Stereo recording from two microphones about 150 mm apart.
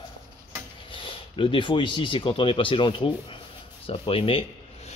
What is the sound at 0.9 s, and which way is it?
Speech, 35° left (ahead or behind).